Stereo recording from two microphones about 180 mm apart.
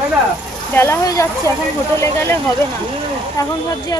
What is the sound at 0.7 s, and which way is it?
Speech, 15° left (ahead or behind).